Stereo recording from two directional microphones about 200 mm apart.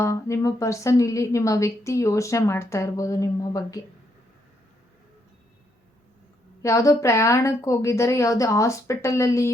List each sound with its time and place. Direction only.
0.0 s a woman's voice: 15° left (ahead or behind)
6.6 s a woman's voice: 15° left (ahead or behind)